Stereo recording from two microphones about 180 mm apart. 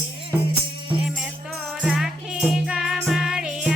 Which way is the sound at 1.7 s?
Centre (ahead or behind).